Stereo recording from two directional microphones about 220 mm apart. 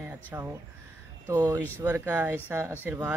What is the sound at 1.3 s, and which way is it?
Speech, 15° right (ahead or behind).